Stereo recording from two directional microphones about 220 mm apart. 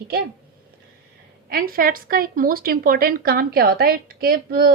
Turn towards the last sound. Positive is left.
turn(degrees=-45)  # may be behind; listen again after turning